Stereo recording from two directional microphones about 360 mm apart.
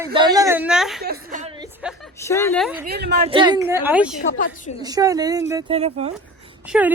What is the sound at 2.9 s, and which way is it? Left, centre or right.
Speech, right.